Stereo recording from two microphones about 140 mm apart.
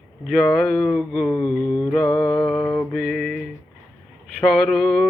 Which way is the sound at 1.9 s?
5° left (ahead or behind).